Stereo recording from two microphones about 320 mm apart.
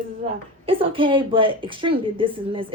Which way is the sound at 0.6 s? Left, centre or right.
Centre.